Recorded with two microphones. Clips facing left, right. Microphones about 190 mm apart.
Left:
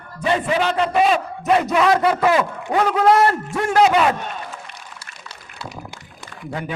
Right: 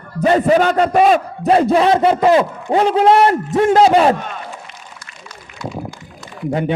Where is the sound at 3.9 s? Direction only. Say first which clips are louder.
Right 5 dB; 35° right (ahead or behind).